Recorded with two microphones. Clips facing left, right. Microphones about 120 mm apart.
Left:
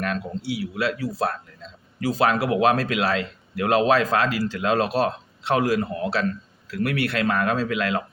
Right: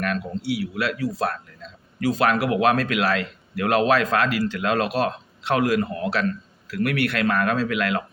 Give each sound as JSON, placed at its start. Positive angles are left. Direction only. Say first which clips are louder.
{"t": 0.0, "sound": "speech", "louder": "right 1 dB", "side_deg": 25}